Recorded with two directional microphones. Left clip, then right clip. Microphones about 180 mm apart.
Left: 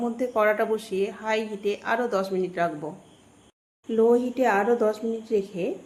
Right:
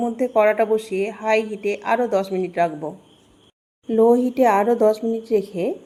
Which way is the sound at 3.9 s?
35° right (ahead or behind).